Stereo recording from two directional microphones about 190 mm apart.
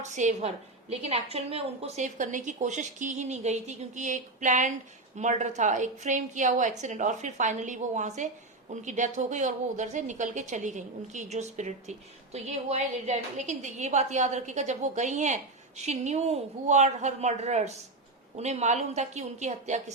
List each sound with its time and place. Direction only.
0.0 s a woman's voice: 40° right (ahead or behind)